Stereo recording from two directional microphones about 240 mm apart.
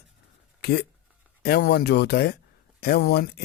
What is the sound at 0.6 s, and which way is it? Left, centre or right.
A man's voice, left.